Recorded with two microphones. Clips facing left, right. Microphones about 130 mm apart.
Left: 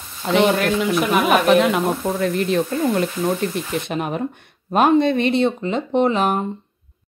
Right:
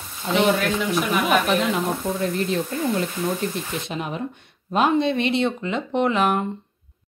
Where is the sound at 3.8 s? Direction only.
55° left (ahead or behind); by 6.3 s 35° left (ahead or behind).